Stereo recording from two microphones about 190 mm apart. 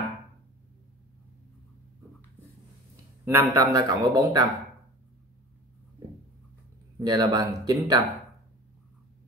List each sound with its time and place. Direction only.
3.3 s speech: 15° right (ahead or behind)
7.0 s speech: 20° right (ahead or behind)